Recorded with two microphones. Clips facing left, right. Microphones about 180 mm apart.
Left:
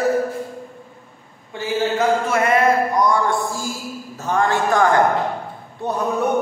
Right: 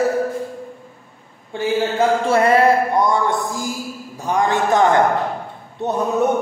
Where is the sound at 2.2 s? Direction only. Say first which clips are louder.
Right 3 dB; 30° right (ahead or behind).